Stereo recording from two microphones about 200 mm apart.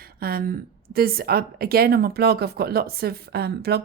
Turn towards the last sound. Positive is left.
turn(degrees=-55)  # may be behind; listen again after turning